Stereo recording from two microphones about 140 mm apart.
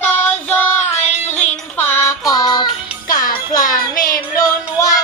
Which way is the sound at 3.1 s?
25° left (ahead or behind).